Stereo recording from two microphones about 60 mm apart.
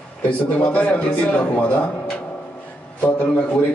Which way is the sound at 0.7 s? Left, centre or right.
Centre.